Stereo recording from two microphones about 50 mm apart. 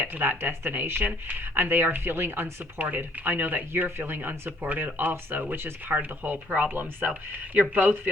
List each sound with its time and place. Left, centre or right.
0.0 s speech: right
2.7 s speech: right